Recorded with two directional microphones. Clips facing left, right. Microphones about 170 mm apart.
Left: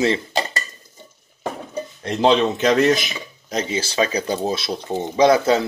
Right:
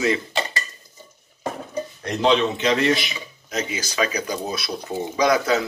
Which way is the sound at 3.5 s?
30° left (ahead or behind).